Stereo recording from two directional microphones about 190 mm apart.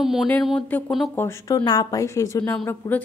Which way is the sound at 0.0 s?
Centre (ahead or behind).